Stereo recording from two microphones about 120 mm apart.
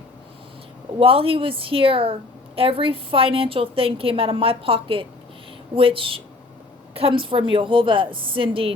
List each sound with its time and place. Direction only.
0.9 s a woman's voice: 50° right (ahead or behind)